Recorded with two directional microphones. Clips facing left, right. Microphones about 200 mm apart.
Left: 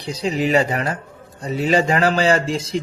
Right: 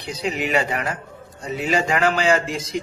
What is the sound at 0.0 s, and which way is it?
A man's voice, 35° left (ahead or behind).